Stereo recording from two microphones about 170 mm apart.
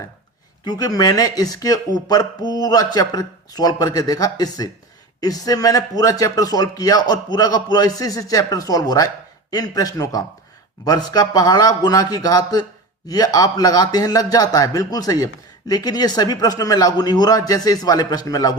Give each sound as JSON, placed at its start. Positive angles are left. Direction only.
{"t": 0.6, "sound": "speech", "side_deg": 20}